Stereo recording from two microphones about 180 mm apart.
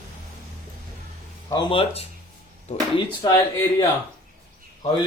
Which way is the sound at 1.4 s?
25° left (ahead or behind).